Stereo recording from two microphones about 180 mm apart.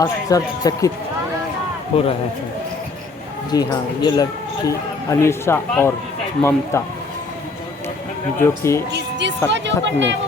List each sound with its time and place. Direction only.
0.0 s speech: 20° left (ahead or behind)
1.9 s speech: 30° left (ahead or behind)
3.5 s speech: 20° left (ahead or behind)
8.4 s speech: 15° left (ahead or behind)
8.9 s music: 75° right (ahead or behind)
9.5 s speech: 80° right